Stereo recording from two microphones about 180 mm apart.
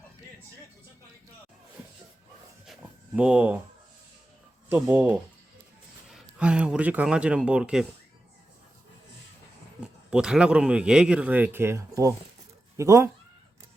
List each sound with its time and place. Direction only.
2.6 s a sound: 5° right (ahead or behind)
4.7 s speech: 10° right (ahead or behind)
9.8 s speech: 5° right (ahead or behind)